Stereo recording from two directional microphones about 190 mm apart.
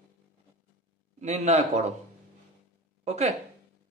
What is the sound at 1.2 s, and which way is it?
Speech, 35° right (ahead or behind).